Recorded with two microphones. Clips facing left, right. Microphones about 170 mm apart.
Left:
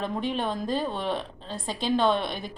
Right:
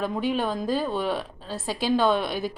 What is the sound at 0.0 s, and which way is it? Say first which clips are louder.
A woman's voice: right 3 dB; 5° right (ahead or behind).